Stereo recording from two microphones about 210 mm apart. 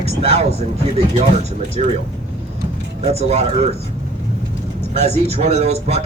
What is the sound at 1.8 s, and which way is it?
Speech, 30° right (ahead or behind).